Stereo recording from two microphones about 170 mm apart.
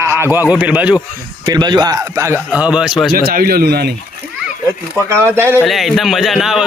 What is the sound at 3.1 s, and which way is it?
Speech, 60° right (ahead or behind).